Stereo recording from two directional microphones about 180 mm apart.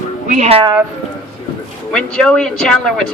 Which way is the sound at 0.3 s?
40° right (ahead or behind).